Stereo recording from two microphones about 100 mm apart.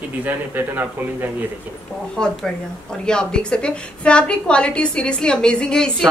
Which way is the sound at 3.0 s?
10° left (ahead or behind).